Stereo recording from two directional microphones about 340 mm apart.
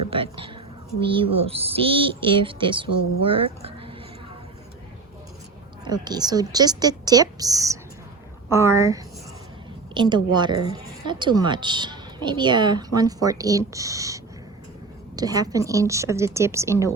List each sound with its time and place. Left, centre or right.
0.1 s a woman's voice: centre
5.8 s a woman's voice: centre